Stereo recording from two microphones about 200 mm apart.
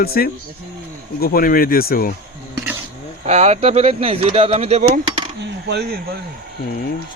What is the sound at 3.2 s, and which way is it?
Speech, 35° right (ahead or behind).